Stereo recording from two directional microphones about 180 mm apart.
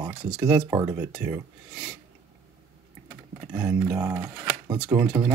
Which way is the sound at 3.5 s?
25° right (ahead or behind).